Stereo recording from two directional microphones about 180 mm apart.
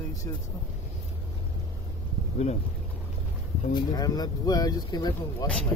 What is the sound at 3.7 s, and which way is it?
Speech, 20° left (ahead or behind).